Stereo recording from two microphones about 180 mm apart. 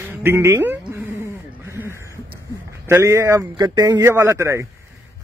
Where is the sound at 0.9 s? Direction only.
15° right (ahead or behind).